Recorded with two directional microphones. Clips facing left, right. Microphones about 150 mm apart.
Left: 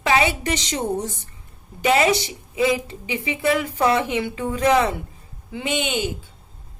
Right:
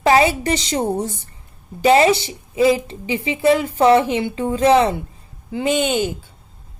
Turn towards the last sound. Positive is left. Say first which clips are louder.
# right 6 dB
turn(degrees=-45)  # may be behind; listen again after turning